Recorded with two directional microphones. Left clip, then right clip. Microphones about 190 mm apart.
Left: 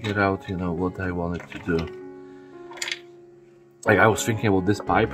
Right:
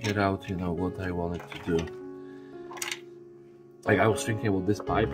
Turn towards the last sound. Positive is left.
turn(degrees=20)  # may be behind; listen again after turning